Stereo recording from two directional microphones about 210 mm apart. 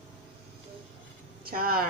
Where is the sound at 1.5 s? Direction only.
45° right (ahead or behind).